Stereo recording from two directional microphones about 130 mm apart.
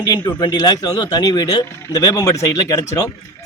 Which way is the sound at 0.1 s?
35° left (ahead or behind).